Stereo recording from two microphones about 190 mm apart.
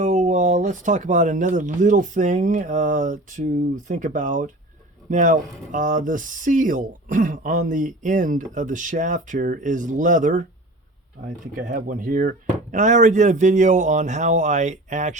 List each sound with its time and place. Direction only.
0.0 s speech: 40° right (ahead or behind)
11.5 s speech: 45° right (ahead or behind)